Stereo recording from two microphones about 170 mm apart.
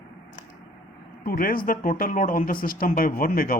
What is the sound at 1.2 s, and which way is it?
Speech, 60° left (ahead or behind).